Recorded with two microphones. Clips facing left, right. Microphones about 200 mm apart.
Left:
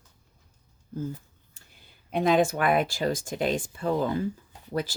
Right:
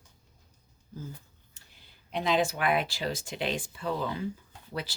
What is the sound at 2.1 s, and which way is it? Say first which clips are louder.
Speech: left 5 dB; 50° left (ahead or behind).